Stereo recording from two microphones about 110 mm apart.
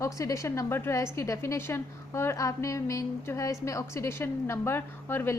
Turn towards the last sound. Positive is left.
turn(degrees=20)  # may be behind; listen again after turning